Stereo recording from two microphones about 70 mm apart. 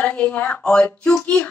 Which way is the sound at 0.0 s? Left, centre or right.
Left.